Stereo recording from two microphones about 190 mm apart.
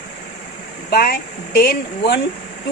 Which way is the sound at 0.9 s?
55° left (ahead or behind).